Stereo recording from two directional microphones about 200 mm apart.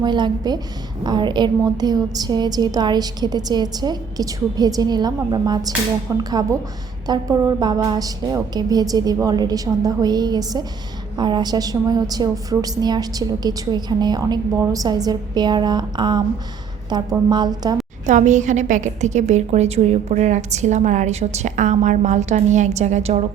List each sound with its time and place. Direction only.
0.0 s a woman's voice: 20° right (ahead or behind)
18.0 s a woman's voice: 40° right (ahead or behind)